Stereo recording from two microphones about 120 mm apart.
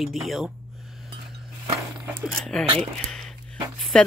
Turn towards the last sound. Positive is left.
turn(degrees=5)  # may be behind; listen again after turning